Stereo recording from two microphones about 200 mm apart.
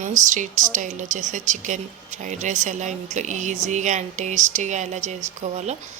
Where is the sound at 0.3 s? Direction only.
40° right (ahead or behind).